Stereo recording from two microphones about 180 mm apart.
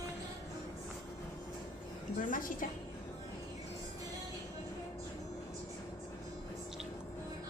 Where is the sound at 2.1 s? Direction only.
50° left (ahead or behind).